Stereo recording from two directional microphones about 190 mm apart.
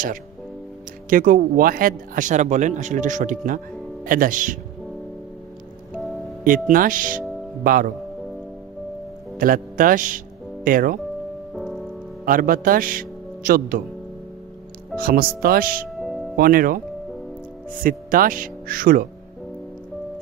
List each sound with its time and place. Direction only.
1.1 s speech: 45° right (ahead or behind)
6.4 s speech: 45° right (ahead or behind)
9.4 s speech: 45° right (ahead or behind)
11.5 s music: centre (ahead or behind)
12.2 s a man's voice: 45° right (ahead or behind)
14.9 s speech: 50° right (ahead or behind)
16.0 s music: centre (ahead or behind)
16.4 s speech: 50° right (ahead or behind)
17.8 s speech: 50° right (ahead or behind)